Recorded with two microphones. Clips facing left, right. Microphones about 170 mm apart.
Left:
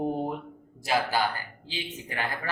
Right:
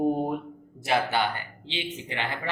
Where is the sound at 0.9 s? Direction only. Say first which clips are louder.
Right 1 dB; 25° right (ahead or behind).